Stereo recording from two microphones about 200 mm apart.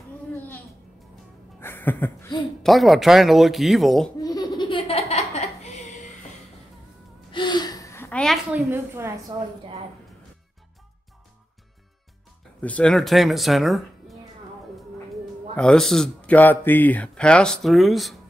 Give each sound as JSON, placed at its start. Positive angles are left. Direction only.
{"t": 1.6, "sound": "a sound", "side_deg": 10}
{"t": 2.6, "sound": "speech", "side_deg": 0}
{"t": 4.2, "sound": "laughter", "side_deg": 20}
{"t": 7.3, "sound": "gasp", "side_deg": 20}
{"t": 8.6, "sound": "a woman's voice", "side_deg": -10}
{"t": 12.6, "sound": "speech", "side_deg": 5}
{"t": 15.5, "sound": "speech", "side_deg": 5}